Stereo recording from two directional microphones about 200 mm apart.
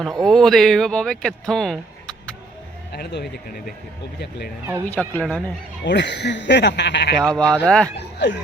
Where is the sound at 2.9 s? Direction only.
50° left (ahead or behind).